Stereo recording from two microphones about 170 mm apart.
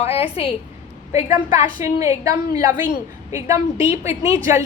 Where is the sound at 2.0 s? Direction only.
20° right (ahead or behind).